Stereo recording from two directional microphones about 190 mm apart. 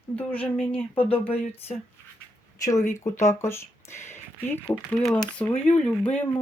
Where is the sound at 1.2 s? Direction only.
30° left (ahead or behind).